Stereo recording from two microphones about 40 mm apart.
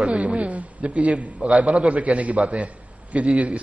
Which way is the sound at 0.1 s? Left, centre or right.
Right.